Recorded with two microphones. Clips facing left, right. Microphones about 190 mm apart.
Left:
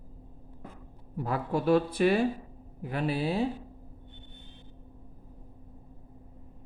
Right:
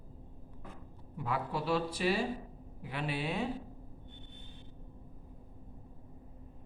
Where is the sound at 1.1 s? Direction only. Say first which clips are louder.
Left 6 dB; 40° left (ahead or behind).